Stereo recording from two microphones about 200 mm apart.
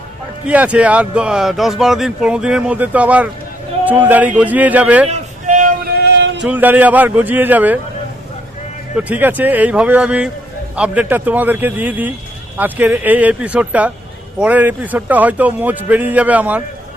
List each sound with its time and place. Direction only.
0.4 s speech: 5° right (ahead or behind)
5.0 s music: 35° right (ahead or behind); by 6.4 s 60° right (ahead or behind)
6.4 s speech: 10° right (ahead or behind)
9.0 s speech: 10° right (ahead or behind)